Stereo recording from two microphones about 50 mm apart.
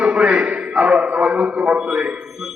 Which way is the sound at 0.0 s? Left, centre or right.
Right.